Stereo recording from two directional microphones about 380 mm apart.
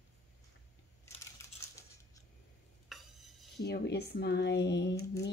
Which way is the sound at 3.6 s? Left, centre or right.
Left.